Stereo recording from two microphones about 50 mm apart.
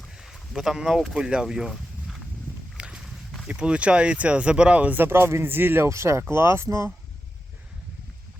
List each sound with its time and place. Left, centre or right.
0.2 s speech: centre
1.7 s a sound: centre
2.7 s walk: centre
3.6 s speech: right
4.9 s speech: right
5.9 s speech: right
6.3 s speech: right